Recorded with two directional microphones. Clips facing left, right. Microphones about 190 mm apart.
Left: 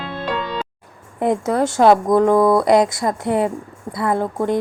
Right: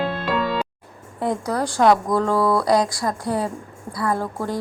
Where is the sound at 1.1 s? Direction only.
20° left (ahead or behind).